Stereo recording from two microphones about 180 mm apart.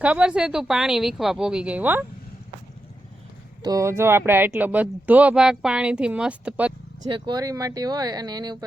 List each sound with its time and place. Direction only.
0.0 s speech: 5° right (ahead or behind)
3.6 s speech: 20° right (ahead or behind)
7.0 s speech: 25° right (ahead or behind)